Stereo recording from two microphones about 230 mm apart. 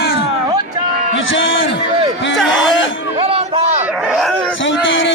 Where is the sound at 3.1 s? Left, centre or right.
Right.